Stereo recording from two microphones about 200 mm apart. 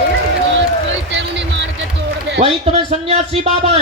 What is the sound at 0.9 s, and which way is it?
Music, 60° right (ahead or behind).